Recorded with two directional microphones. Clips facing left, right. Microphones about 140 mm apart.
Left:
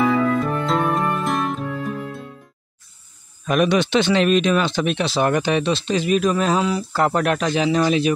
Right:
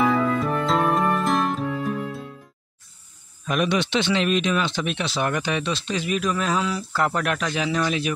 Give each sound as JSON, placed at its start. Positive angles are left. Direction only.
{"t": 0.0, "sound": "music", "side_deg": 0}
{"t": 3.4, "sound": "speech", "side_deg": 50}